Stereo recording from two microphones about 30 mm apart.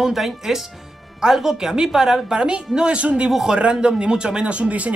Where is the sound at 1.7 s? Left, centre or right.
Right.